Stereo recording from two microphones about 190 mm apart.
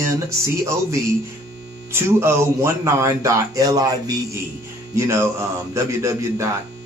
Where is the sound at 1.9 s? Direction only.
15° right (ahead or behind).